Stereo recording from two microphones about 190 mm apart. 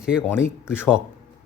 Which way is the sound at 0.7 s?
10° left (ahead or behind).